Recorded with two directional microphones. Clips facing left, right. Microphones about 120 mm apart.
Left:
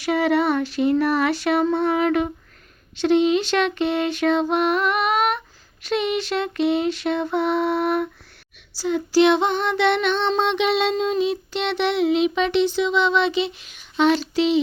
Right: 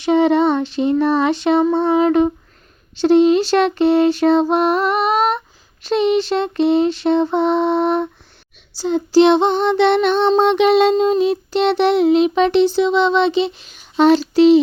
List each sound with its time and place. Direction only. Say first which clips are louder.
0.0 s lullaby: right 6 dB; 25° right (ahead or behind)
3.0 s child singing: right 6 dB; 35° right (ahead or behind)
5.8 s lullaby: right 7 dB; 30° right (ahead or behind)
8.8 s child singing: right 5 dB; 25° right (ahead or behind)